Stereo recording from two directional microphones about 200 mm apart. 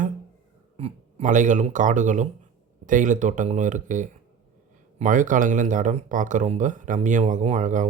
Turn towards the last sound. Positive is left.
turn(degrees=-40)  # may be behind; listen again after turning